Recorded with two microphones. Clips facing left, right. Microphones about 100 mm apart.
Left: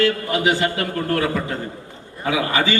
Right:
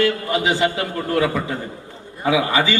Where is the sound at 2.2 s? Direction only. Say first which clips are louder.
Right 2 dB; 20° right (ahead or behind).